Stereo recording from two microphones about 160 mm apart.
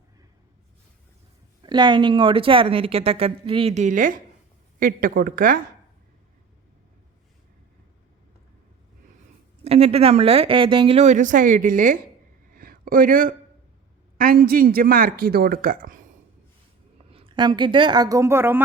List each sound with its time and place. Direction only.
1.6 s a woman's voice: 30° right (ahead or behind); by 5.5 s 60° right (ahead or behind)
9.6 s speech: 40° right (ahead or behind); by 11.9 s 55° right (ahead or behind)
12.5 s a sound: 65° right (ahead or behind)
14.2 s a man's voice: 65° right (ahead or behind)
17.1 s a woman's voice: 35° right (ahead or behind); by 18.6 s 15° right (ahead or behind)